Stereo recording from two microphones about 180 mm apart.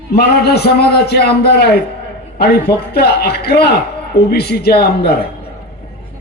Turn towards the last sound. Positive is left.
turn(degrees=60)  # may be behind; listen again after turning